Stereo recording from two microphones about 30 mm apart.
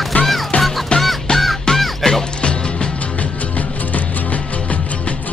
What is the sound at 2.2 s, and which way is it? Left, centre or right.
Music, left.